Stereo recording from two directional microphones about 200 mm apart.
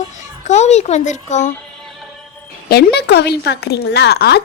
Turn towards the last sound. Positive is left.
turn(degrees=55)  # may be behind; listen again after turning